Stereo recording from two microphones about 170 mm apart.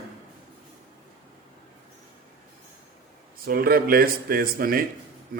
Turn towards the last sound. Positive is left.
turn(degrees=-60)  # may be behind; listen again after turning